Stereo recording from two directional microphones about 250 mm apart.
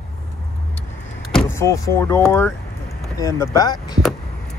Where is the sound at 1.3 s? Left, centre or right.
Centre.